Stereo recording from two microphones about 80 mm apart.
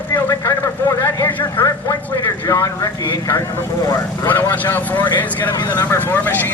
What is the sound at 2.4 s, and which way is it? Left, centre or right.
Speech, left.